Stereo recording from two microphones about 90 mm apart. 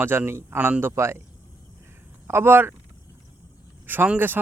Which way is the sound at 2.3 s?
25° right (ahead or behind).